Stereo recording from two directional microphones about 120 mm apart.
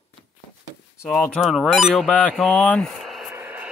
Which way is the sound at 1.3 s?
5° right (ahead or behind).